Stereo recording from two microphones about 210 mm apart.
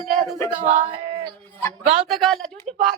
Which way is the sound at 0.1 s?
Centre (ahead or behind).